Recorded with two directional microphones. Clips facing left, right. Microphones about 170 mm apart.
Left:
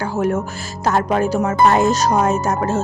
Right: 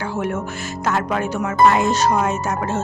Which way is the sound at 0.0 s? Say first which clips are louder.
Left 4 dB; 40° left (ahead or behind).